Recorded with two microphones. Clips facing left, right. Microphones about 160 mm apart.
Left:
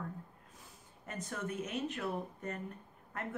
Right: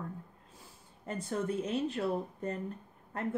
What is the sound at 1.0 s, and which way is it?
Speech, 30° right (ahead or behind).